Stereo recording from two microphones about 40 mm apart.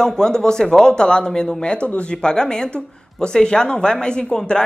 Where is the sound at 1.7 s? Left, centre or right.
Left.